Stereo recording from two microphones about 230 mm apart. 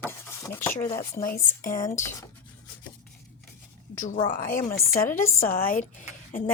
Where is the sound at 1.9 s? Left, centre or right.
Centre.